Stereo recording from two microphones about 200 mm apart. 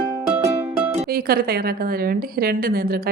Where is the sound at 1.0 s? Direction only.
50° right (ahead or behind).